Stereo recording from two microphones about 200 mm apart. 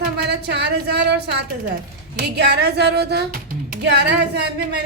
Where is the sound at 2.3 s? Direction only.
55° right (ahead or behind).